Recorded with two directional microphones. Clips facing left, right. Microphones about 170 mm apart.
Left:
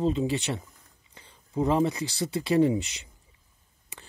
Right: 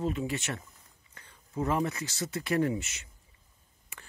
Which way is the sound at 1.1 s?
20° left (ahead or behind).